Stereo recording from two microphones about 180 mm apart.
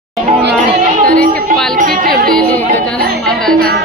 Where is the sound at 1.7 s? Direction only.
50° right (ahead or behind).